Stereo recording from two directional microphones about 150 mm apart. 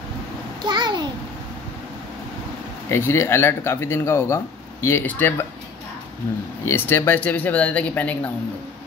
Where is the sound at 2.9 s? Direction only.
15° left (ahead or behind).